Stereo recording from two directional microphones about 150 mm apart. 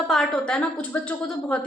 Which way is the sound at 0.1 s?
5° left (ahead or behind).